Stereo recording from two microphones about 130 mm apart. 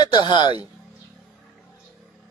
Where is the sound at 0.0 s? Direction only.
35° left (ahead or behind).